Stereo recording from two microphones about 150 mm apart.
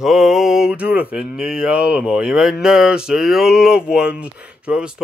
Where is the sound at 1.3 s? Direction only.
5° right (ahead or behind).